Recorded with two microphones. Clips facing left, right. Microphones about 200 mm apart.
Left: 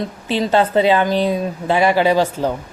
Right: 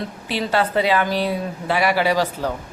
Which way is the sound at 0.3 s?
25° left (ahead or behind).